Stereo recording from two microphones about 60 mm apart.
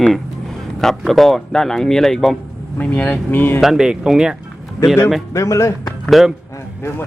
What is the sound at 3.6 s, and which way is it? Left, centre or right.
Speech, centre.